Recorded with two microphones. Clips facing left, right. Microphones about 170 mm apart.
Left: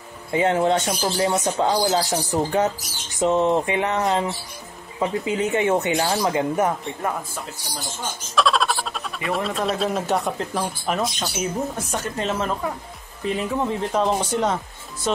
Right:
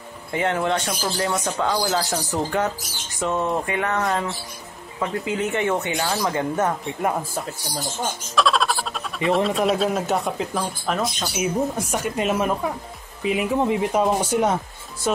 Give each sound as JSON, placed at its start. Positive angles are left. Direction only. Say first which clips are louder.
{"t": 0.3, "sound": "speech", "louder": "left 3 dB", "side_deg": 20}
{"t": 8.4, "sound": "music", "louder": "even", "side_deg": 0}
{"t": 9.3, "sound": "speech", "louder": "right 4 dB", "side_deg": 0}